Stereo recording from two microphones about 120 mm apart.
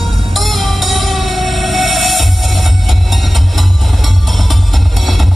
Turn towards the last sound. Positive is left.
turn(degrees=0)  # may be behind; listen again after turning